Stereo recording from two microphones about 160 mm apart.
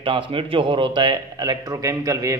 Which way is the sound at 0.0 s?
35° right (ahead or behind).